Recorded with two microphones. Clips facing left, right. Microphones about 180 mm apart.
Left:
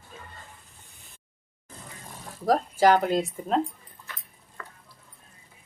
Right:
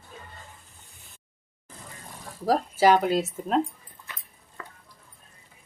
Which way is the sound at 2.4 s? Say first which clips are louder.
Even; 5° right (ahead or behind).